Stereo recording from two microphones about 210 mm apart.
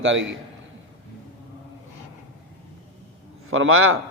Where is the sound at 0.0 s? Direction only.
65° right (ahead or behind).